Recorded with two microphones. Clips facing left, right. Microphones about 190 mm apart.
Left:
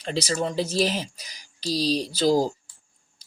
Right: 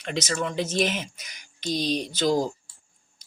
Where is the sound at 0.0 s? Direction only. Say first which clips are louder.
Left 2 dB; 35° left (ahead or behind).